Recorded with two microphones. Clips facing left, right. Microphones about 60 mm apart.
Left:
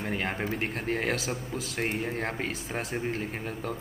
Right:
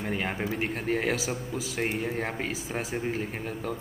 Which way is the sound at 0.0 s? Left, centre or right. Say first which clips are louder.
Right 1 dB; centre.